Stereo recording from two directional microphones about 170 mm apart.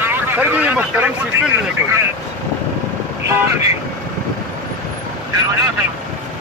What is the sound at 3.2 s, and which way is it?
Speech, 15° right (ahead or behind).